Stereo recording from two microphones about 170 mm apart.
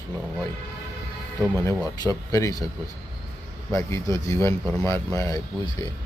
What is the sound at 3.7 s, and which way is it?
Speech, 20° left (ahead or behind).